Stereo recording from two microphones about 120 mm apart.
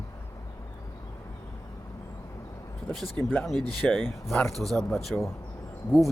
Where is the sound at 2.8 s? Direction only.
5° left (ahead or behind).